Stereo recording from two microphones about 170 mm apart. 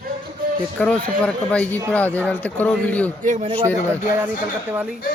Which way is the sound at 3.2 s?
45° right (ahead or behind).